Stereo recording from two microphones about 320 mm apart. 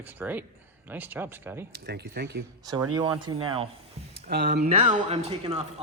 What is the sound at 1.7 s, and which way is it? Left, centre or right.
Speech, right.